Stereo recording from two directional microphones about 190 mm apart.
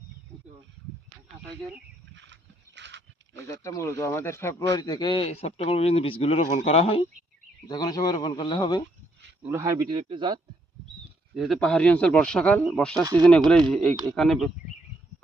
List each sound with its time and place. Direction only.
2.1 s a sound: 70° right (ahead or behind)
3.4 s a man's voice: 15° left (ahead or behind); by 7.0 s 30° left (ahead or behind)
7.7 s speech: 20° left (ahead or behind)
9.4 s a man's voice: 15° right (ahead or behind)
11.3 s speech: centre (ahead or behind)